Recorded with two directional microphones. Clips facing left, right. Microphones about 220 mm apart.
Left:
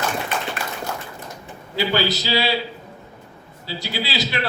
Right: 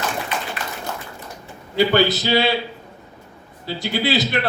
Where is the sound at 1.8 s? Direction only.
55° right (ahead or behind).